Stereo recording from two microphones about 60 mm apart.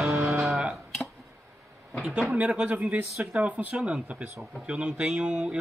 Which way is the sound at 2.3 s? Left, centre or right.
Right.